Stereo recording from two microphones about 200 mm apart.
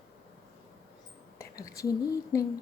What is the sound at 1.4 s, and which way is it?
Speech, 15° left (ahead or behind).